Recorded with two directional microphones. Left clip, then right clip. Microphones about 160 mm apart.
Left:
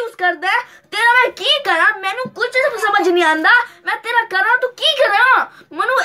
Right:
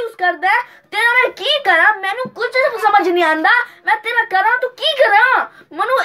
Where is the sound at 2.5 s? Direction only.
30° left (ahead or behind).